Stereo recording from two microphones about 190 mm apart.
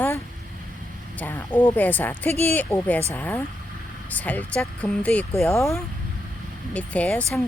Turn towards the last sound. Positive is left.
turn(degrees=10)  # may be behind; listen again after turning